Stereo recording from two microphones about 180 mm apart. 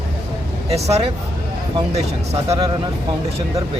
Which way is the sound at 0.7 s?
35° right (ahead or behind).